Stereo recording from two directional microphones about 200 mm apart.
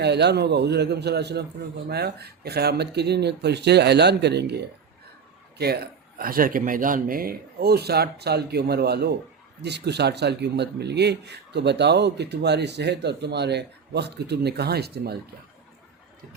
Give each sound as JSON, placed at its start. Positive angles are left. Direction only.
{"t": 0.0, "sound": "speech", "side_deg": -55}
{"t": 5.5, "sound": "speech", "side_deg": -55}